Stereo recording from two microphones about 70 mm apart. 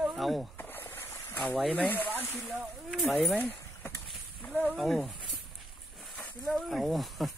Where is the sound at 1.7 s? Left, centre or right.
Left.